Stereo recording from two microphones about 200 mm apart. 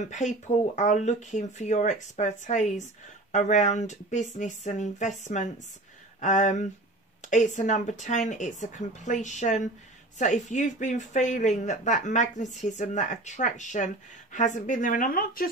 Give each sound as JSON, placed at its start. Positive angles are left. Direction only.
{"t": 0.1, "sound": "speech", "side_deg": 35}